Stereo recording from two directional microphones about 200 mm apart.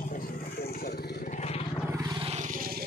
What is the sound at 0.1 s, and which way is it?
Vehicle, 50° left (ahead or behind).